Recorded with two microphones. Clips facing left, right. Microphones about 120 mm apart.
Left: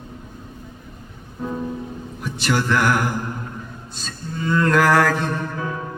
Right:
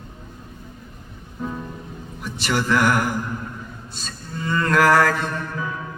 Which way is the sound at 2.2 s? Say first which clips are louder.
Left 2 dB; centre (ahead or behind).